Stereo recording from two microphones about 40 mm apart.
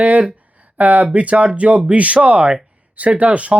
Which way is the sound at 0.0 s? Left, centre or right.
Right.